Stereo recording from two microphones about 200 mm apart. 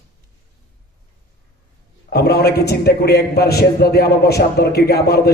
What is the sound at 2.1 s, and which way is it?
A man's voice, 55° left (ahead or behind).